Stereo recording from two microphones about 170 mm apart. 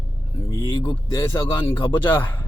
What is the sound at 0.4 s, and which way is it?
Speech, 20° left (ahead or behind).